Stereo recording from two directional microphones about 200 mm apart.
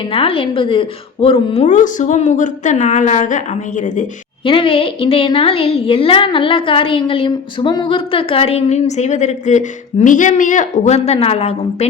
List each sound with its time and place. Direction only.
0.1 s a woman's voice: 25° left (ahead or behind)
4.4 s a woman's voice: 25° left (ahead or behind)